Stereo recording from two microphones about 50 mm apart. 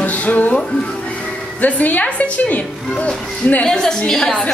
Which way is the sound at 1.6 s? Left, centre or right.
Left.